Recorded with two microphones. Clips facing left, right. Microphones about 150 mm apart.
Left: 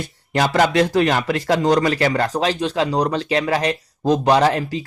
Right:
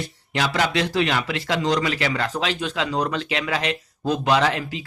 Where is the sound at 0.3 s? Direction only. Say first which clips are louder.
Left 6 dB; 50° left (ahead or behind).